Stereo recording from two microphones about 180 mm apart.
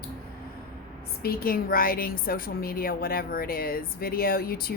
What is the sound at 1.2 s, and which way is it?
A woman's voice, 55° left (ahead or behind).